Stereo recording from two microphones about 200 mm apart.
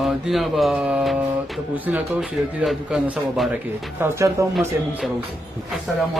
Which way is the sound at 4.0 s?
15° right (ahead or behind).